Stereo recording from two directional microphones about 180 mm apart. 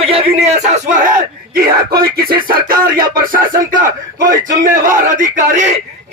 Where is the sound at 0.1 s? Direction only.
35° right (ahead or behind).